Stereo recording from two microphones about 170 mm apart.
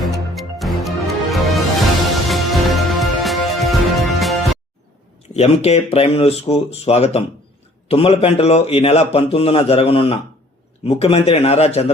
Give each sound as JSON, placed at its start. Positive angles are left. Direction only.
{"t": 0.0, "sound": "music", "side_deg": 0}
{"t": 5.3, "sound": "speech", "side_deg": 40}